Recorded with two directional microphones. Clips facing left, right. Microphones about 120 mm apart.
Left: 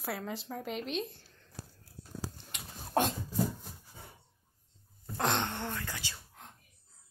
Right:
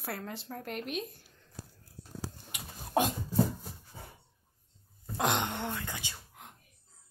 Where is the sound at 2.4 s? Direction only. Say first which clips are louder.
Right 1 dB; 5° right (ahead or behind).